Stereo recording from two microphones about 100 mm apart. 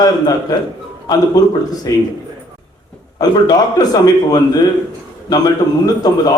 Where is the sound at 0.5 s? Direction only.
40° left (ahead or behind).